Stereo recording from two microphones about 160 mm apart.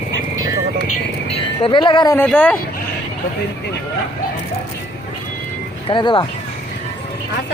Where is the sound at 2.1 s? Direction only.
10° left (ahead or behind).